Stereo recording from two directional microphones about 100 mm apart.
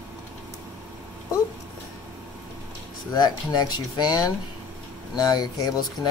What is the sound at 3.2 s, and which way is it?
Speech, 40° left (ahead or behind).